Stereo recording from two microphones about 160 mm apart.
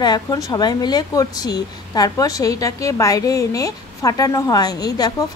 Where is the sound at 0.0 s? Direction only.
25° left (ahead or behind).